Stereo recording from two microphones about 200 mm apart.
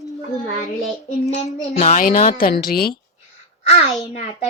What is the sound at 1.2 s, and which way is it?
A woman's voice, 30° left (ahead or behind).